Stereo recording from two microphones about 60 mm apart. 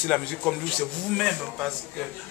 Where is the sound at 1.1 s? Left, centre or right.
Centre.